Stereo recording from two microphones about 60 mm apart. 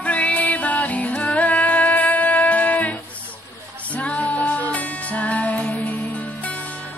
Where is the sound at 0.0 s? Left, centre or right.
Left.